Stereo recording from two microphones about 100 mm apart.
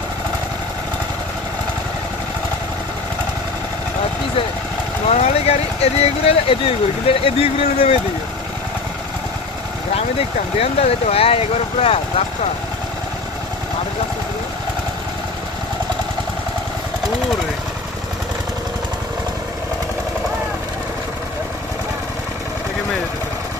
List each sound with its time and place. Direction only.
5.0 s speech: 90° left
9.9 s speech: 80° left